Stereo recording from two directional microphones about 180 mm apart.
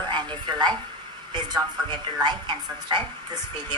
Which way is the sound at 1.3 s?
25° right (ahead or behind).